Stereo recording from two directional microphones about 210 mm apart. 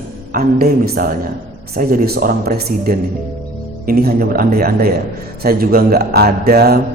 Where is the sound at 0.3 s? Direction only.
45° right (ahead or behind).